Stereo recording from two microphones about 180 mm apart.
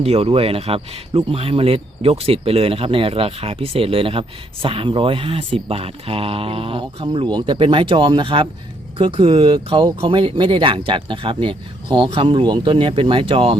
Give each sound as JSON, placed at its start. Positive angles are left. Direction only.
{"t": 0.0, "sound": "speech", "side_deg": -35}